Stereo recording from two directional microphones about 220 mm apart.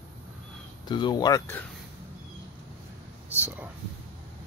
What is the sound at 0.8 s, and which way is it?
Speech, 20° left (ahead or behind).